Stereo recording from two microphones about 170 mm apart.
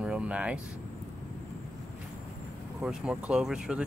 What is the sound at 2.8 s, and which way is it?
Speech, 5° right (ahead or behind).